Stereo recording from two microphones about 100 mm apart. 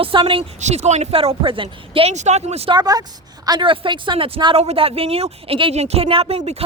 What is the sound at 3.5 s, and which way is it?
A woman's voice, 55° right (ahead or behind).